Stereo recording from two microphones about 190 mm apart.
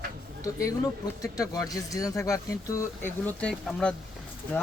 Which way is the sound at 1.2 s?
20° left (ahead or behind).